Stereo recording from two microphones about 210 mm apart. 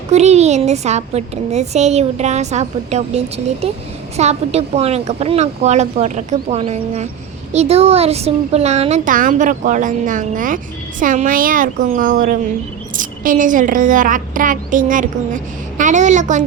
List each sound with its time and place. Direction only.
0.1 s a woman's voice: 30° right (ahead or behind)